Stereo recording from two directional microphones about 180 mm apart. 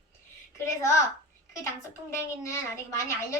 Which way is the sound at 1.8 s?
15° left (ahead or behind).